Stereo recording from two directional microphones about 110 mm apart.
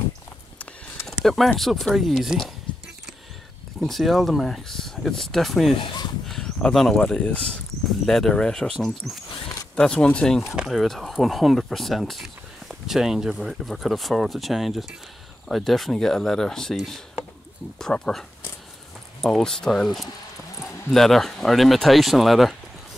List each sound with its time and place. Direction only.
1.0 s speech: centre (ahead or behind)
3.8 s speech: centre (ahead or behind)
5.8 s speech: 45° left (ahead or behind)
6.2 s speech: 5° left (ahead or behind)
10.5 s speech: 5° right (ahead or behind)
19.2 s speech: 5° left (ahead or behind)